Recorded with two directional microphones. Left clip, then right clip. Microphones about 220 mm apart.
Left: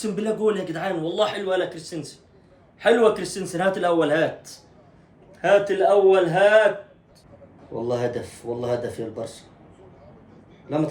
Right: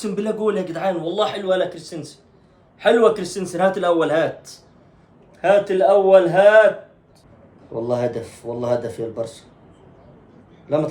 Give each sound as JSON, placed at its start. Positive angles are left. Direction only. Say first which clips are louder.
{"t": 0.0, "sound": "speech", "louder": "right 1 dB", "side_deg": -15}
{"t": 7.8, "sound": "speech", "louder": "right 3 dB", "side_deg": -10}
{"t": 10.7, "sound": "speech", "louder": "right 5 dB", "side_deg": -15}